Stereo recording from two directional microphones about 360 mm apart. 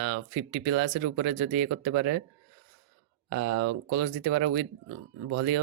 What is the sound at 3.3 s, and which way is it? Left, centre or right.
Speech, right.